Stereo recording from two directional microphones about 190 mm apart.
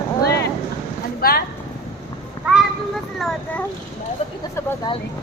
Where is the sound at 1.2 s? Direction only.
50° left (ahead or behind).